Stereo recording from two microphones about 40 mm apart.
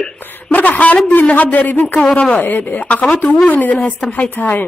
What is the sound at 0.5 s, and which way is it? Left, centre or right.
A man's voice, left.